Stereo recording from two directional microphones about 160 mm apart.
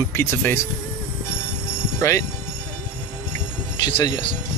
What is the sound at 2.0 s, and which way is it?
Speech, 20° left (ahead or behind).